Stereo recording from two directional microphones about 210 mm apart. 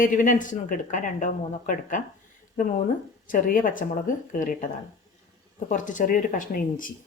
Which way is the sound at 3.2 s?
40° left (ahead or behind).